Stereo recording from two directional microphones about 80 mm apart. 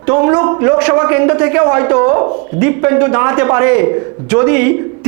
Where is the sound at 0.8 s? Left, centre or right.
Centre.